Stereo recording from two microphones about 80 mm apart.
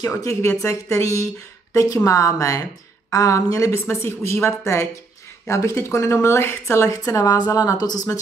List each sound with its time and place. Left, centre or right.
0.0 s speech: left